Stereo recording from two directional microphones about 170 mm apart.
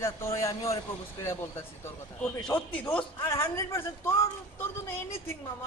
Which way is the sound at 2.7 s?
10° left (ahead or behind).